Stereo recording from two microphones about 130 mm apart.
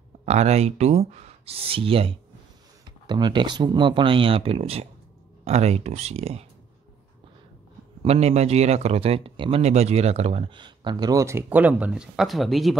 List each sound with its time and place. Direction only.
0.2 s speech: 60° right (ahead or behind)
2.8 s speech: 35° right (ahead or behind); by 6.4 s 55° right (ahead or behind)
8.0 s speech: 55° right (ahead or behind)
10.5 s speech: 35° right (ahead or behind); by 12.7 s centre (ahead or behind)